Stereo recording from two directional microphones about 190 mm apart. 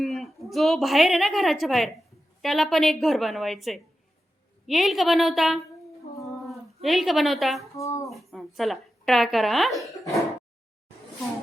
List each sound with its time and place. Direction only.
0.0 s a woman's voice: centre (ahead or behind)
6.0 s humming: 35° left (ahead or behind)
6.8 s a woman's voice: centre (ahead or behind)
7.8 s speech: 15° left (ahead or behind)
8.1 s speech: centre (ahead or behind)